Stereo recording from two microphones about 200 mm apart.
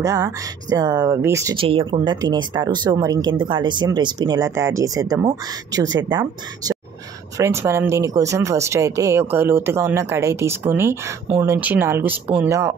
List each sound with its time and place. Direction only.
0.0 s speech: 15° right (ahead or behind)
1.6 s speech: 25° right (ahead or behind)